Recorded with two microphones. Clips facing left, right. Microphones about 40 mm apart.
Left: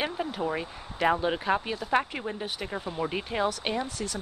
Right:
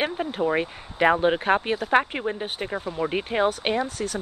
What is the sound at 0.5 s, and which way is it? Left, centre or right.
Speech, right.